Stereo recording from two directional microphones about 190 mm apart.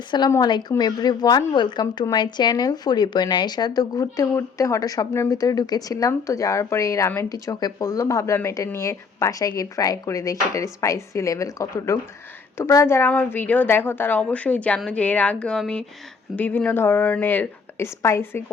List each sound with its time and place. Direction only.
0.1 s a woman's voice: 20° left (ahead or behind)